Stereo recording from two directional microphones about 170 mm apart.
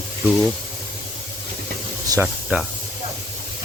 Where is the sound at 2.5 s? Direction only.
10° right (ahead or behind).